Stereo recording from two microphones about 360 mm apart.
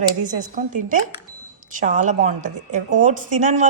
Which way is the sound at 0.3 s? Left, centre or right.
Right.